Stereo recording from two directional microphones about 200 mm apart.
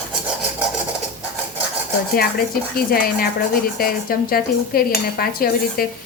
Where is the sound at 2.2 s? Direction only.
50° left (ahead or behind).